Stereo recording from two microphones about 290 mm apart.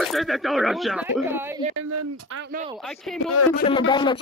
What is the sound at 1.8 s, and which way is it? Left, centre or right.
Speech, right.